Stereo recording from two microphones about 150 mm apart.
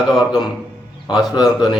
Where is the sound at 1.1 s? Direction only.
25° left (ahead or behind).